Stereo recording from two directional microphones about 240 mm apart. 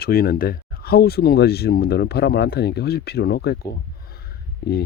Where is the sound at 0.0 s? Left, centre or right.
Left.